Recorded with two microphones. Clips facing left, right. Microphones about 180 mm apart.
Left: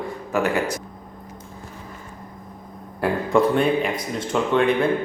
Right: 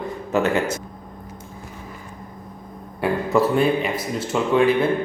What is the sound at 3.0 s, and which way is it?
A man's voice, 5° right (ahead or behind).